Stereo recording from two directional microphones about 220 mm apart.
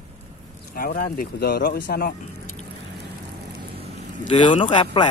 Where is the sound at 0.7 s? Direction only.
40° left (ahead or behind).